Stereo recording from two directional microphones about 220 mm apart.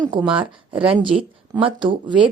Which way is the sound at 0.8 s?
25° right (ahead or behind).